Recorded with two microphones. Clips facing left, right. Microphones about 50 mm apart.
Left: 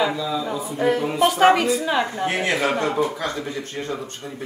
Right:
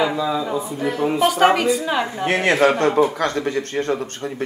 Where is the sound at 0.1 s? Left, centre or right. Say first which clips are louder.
Right 3 dB; right.